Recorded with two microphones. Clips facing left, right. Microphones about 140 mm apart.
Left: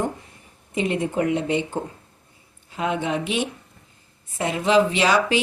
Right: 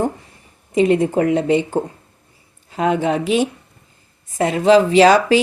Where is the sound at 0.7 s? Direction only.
40° right (ahead or behind).